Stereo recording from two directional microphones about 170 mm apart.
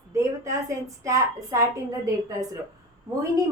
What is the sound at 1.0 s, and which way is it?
Speech, 20° right (ahead or behind).